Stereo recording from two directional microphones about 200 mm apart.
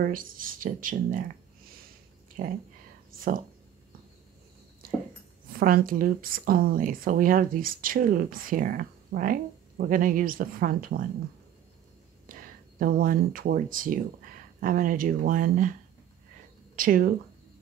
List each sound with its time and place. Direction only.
0.0 s a woman's voice: 45° right (ahead or behind)
2.4 s a woman's voice: 45° right (ahead or behind)
4.8 s a sound: 45° right (ahead or behind)
5.6 s a woman's voice: 45° right (ahead or behind)
12.3 s a woman's voice: 45° right (ahead or behind)
16.7 s speech: 45° right (ahead or behind)